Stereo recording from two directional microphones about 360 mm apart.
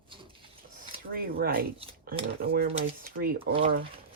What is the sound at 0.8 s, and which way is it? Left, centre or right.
Speech, right.